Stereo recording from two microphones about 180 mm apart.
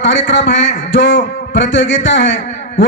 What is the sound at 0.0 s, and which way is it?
A man's voice, 80° left.